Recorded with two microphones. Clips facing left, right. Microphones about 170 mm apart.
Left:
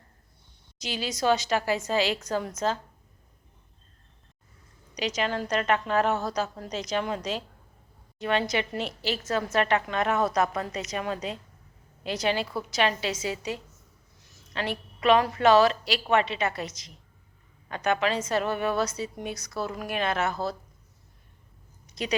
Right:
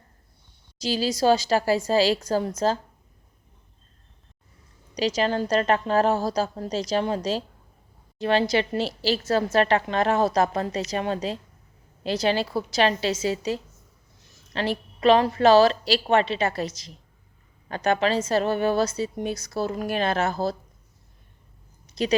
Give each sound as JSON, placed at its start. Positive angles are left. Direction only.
{"t": 0.8, "sound": "a woman's voice", "side_deg": -35}
{"t": 4.9, "sound": "a woman's voice", "side_deg": -35}
{"t": 21.8, "sound": "a sound", "side_deg": -30}